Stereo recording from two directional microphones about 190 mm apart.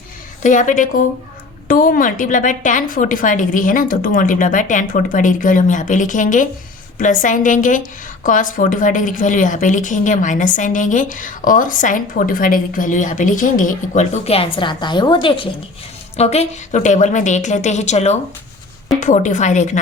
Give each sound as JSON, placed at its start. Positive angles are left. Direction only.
{"t": 0.4, "sound": "a woman's voice", "side_deg": 40}